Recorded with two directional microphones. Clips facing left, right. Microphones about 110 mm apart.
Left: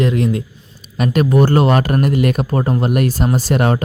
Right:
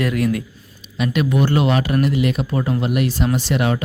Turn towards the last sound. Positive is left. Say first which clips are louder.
# left 3 dB
turn(degrees=45)  # may be behind; listen again after turning